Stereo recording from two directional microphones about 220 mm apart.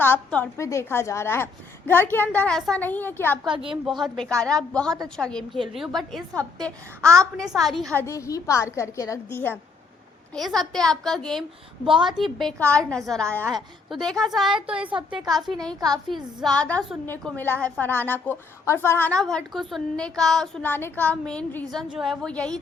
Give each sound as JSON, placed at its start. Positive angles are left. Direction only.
{"t": 0.0, "sound": "a woman's voice", "side_deg": 10}
{"t": 3.4, "sound": "a woman's voice", "side_deg": -20}
{"t": 3.8, "sound": "a woman's voice", "side_deg": 0}
{"t": 8.0, "sound": "a woman's voice", "side_deg": 15}
{"t": 11.9, "sound": "a woman's voice", "side_deg": -20}
{"t": 12.1, "sound": "a woman's voice", "side_deg": 0}